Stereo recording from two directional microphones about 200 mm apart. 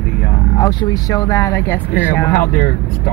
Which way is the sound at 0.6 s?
20° left (ahead or behind).